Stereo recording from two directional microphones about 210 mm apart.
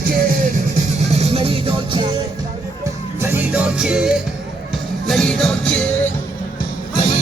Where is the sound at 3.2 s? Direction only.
10° right (ahead or behind).